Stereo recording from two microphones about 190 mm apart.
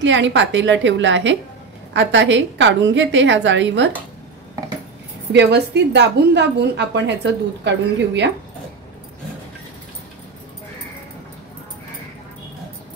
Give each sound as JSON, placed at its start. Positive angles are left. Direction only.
{"t": 0.0, "sound": "a woman's voice", "side_deg": -75}
{"t": 5.3, "sound": "a woman's voice", "side_deg": -65}